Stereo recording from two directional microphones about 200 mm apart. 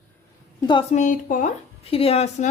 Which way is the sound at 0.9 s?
40° left (ahead or behind).